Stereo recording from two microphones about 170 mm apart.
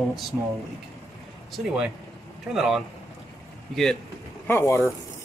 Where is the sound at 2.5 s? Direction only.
Centre (ahead or behind).